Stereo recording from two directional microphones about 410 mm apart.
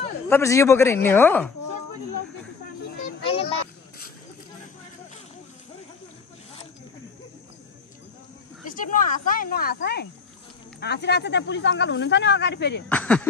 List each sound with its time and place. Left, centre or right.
0.3 s speech: centre
3.3 s a sound: centre
8.6 s speech: centre
12.9 s speech: centre